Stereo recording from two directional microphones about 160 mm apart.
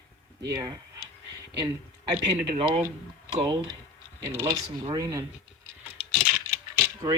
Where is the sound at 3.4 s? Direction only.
25° right (ahead or behind).